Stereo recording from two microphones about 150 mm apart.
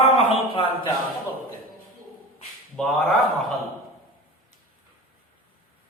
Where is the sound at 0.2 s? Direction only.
40° left (ahead or behind).